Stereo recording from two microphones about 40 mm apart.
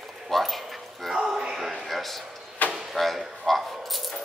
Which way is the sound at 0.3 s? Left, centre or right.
Centre.